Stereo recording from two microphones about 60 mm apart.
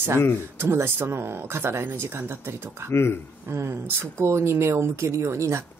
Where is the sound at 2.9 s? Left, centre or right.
Left.